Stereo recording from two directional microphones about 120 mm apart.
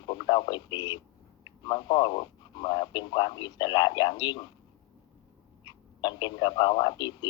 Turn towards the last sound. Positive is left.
turn(degrees=35)  # may be behind; listen again after turning